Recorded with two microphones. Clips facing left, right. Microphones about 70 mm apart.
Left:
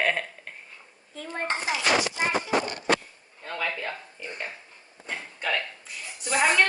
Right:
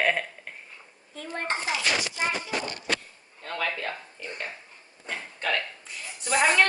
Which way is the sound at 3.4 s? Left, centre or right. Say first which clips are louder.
Even; centre.